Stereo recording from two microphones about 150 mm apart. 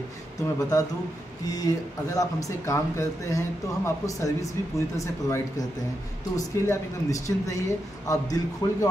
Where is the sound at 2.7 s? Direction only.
20° left (ahead or behind).